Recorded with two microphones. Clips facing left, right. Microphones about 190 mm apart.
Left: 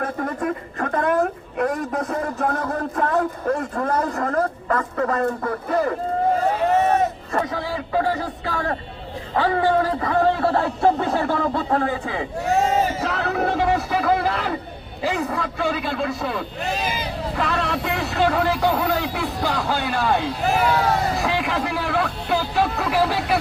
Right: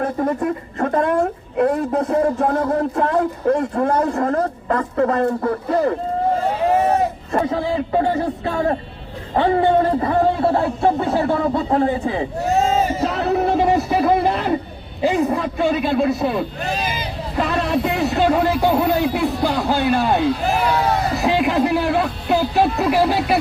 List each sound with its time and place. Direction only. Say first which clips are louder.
0.0 s a woman's voice: right 5 dB; 25° right (ahead or behind)
7.3 s a woman's voice: right 7 dB; 25° right (ahead or behind)
13.1 s a sound: right 5 dB; 30° right (ahead or behind)
15.0 s a woman's voice: right 6 dB; 25° right (ahead or behind)
21.2 s speech: right 6 dB; 20° right (ahead or behind)